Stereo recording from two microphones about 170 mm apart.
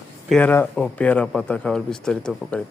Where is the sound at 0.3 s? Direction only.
5° left (ahead or behind).